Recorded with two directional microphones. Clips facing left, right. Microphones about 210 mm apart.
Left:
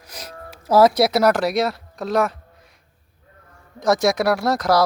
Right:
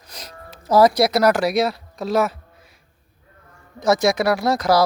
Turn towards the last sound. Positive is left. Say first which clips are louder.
# right 1 dB
turn(degrees=0)  # may be behind; listen again after turning